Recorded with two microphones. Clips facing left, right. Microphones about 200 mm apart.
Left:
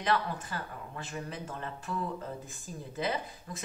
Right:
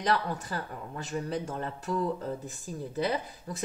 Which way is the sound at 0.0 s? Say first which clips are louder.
Right 2 dB; 35° right (ahead or behind).